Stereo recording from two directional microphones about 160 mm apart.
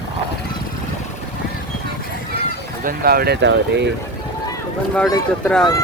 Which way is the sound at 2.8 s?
70° right (ahead or behind).